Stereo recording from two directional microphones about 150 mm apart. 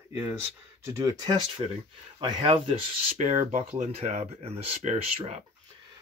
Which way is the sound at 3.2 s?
50° right (ahead or behind).